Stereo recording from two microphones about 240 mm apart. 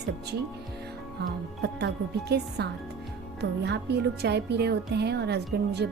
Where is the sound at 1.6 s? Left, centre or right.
Right.